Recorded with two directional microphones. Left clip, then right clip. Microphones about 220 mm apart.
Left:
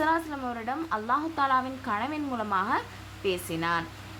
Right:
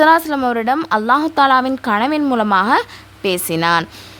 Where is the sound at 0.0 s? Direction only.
50° right (ahead or behind).